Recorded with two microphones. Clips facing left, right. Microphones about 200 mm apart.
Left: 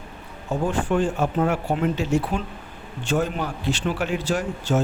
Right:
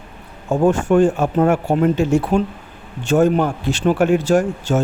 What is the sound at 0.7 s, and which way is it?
A man's voice, 45° right (ahead or behind).